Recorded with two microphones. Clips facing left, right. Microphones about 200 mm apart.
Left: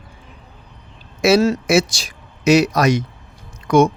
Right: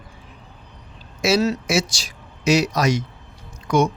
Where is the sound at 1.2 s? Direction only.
55° left (ahead or behind).